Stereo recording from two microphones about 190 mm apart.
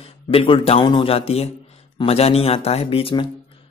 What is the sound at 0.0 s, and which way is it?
Speech, 30° left (ahead or behind).